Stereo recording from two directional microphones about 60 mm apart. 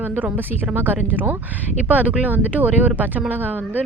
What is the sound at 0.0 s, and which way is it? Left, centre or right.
A woman's voice, right.